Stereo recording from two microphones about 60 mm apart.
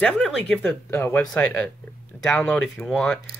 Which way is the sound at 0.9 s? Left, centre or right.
Left.